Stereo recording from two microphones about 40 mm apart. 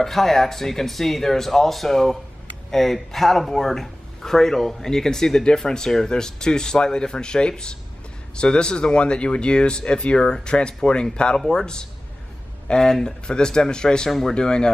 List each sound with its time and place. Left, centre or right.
0.0 s speech: centre; by 14.7 s left